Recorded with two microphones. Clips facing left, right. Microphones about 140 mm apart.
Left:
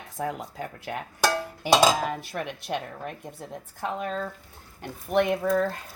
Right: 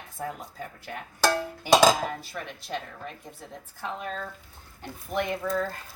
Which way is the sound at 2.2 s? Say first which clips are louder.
Left 5 dB; 65° left (ahead or behind).